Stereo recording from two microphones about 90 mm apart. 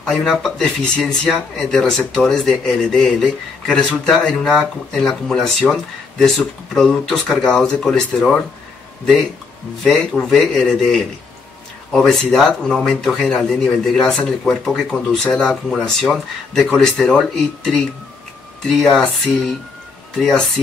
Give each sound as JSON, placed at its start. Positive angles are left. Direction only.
{"t": 0.0, "sound": "speech", "side_deg": 5}
{"t": 9.8, "sound": "speech", "side_deg": 5}